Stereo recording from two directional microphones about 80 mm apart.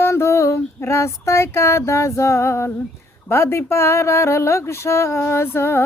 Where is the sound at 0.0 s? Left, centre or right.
Left.